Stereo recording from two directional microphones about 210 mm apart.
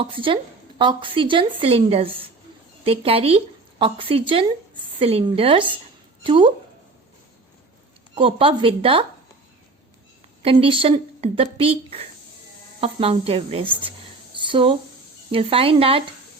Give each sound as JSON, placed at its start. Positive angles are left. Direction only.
{"t": 0.0, "sound": "speech", "side_deg": -25}
{"t": 8.1, "sound": "speech", "side_deg": -25}
{"t": 10.4, "sound": "speech", "side_deg": -25}
{"t": 14.3, "sound": "a sound", "side_deg": -25}
{"t": 15.3, "sound": "speech", "side_deg": -25}